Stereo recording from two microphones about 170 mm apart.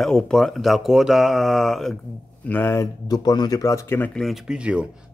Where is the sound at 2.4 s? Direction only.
10° left (ahead or behind).